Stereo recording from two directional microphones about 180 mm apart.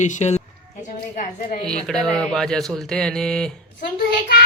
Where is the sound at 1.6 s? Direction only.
5° left (ahead or behind).